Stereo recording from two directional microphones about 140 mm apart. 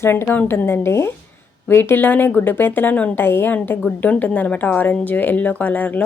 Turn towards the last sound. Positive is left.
turn(degrees=10)  # may be behind; listen again after turning